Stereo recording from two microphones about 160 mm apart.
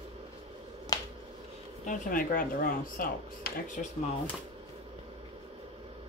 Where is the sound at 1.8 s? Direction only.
50° left (ahead or behind).